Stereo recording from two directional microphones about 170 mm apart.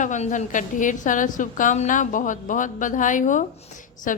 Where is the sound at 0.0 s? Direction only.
45° left (ahead or behind).